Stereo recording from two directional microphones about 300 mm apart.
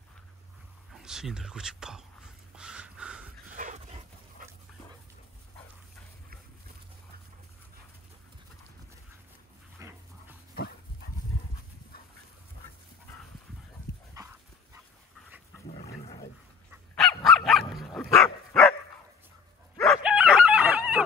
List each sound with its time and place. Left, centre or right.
0.9 s speech: centre
2.5 s a sound: centre
3.5 s dog: right
9.8 s dog: centre
14.1 s dog: centre
16.0 s wild animals: centre
16.7 s dog: centre
19.8 s chicken: centre